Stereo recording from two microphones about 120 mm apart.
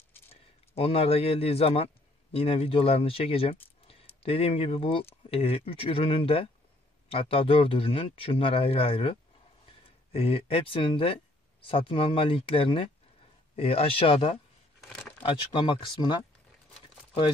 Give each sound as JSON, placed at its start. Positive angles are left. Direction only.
{"t": 0.7, "sound": "speech", "side_deg": 55}
{"t": 14.8, "sound": "crumpling", "side_deg": 0}
{"t": 15.2, "sound": "speech", "side_deg": 40}